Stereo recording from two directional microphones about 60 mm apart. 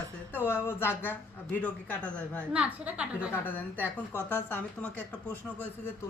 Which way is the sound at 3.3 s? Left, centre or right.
Left.